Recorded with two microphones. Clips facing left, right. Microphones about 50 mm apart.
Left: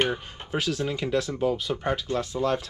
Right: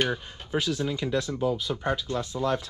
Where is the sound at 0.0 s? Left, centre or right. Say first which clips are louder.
Left 1 dB; left.